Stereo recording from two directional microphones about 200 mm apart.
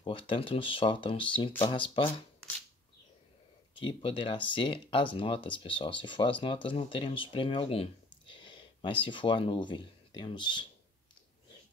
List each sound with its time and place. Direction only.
0.3 s speech: 25° left (ahead or behind)
3.7 s speech: 25° left (ahead or behind)